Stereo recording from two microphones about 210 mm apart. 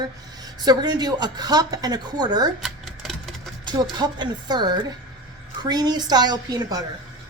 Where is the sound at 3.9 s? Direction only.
20° right (ahead or behind).